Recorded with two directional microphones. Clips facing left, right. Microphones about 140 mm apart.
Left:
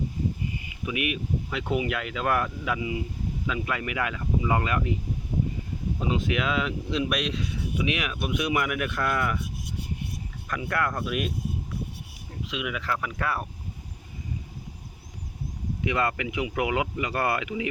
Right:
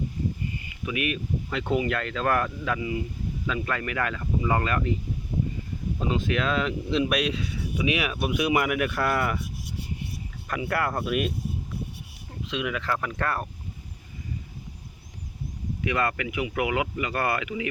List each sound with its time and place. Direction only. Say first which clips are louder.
0.9 s speech: right 1 dB; 15° left (ahead or behind)
1.5 s speech: right 3 dB; 5° left (ahead or behind)
6.0 s speech: right 1 dB; 15° left (ahead or behind); by 9.4 s 5° right (ahead or behind)
10.5 s speech: right 1 dB; 5° right (ahead or behind)
12.5 s speech: right 2 dB; 5° left (ahead or behind)
15.8 s speech: even; 20° left (ahead or behind)